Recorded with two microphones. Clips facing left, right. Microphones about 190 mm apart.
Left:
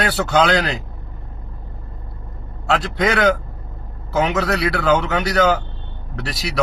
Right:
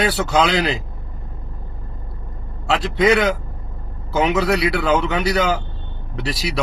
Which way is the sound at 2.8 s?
Centre (ahead or behind).